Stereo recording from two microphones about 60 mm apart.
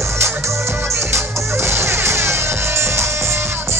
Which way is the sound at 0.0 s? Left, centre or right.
Right.